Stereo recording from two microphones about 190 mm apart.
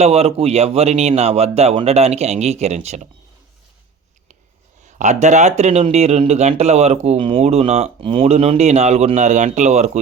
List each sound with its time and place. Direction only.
0.0 s speech: 35° right (ahead or behind)
4.9 s speech: 40° right (ahead or behind)